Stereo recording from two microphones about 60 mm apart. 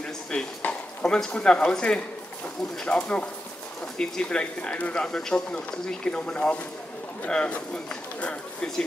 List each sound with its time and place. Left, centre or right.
0.6 s a sound: left
1.3 s speech: centre
3.0 s speech: centre